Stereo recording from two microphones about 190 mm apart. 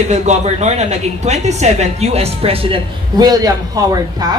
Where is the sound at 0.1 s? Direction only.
35° right (ahead or behind).